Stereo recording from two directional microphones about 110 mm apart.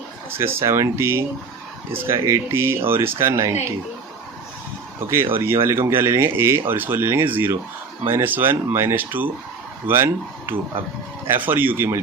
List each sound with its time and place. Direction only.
0.3 s speech: 20° right (ahead or behind)
4.9 s speech: 25° right (ahead or behind)